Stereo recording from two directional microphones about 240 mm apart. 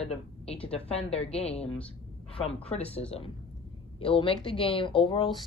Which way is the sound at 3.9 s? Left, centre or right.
Left.